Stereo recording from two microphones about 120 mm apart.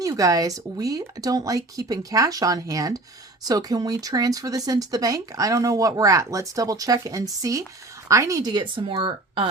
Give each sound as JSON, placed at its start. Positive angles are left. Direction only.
{"t": 0.0, "sound": "speech", "side_deg": -30}